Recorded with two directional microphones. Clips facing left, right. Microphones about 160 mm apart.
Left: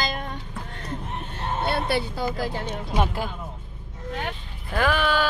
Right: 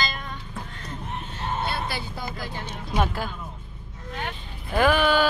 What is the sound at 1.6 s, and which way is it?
Speech, 65° left (ahead or behind).